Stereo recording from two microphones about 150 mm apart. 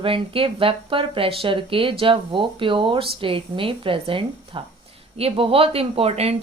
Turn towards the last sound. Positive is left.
turn(degrees=-45)  # may be behind; listen again after turning